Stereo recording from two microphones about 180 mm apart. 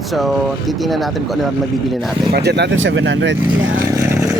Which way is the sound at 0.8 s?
Centre (ahead or behind).